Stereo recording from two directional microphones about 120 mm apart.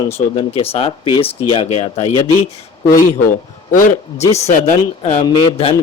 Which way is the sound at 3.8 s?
65° left (ahead or behind).